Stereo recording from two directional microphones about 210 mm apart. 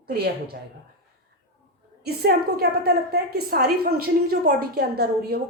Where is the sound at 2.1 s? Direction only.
50° right (ahead or behind).